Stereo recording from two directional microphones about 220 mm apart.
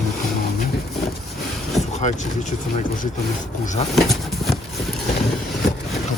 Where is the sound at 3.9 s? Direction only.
Centre (ahead or behind).